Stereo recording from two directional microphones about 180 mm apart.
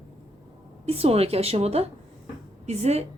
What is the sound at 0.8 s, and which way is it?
Speech, 35° right (ahead or behind).